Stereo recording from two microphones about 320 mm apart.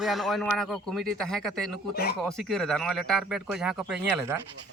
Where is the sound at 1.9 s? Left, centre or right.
Left.